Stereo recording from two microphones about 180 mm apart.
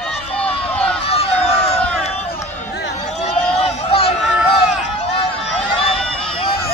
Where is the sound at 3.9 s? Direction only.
30° left (ahead or behind).